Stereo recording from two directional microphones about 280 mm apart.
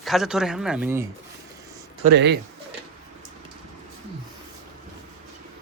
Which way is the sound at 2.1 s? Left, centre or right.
Right.